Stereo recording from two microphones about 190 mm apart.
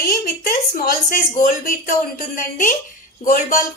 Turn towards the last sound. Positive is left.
turn(degrees=45)  # may be behind; listen again after turning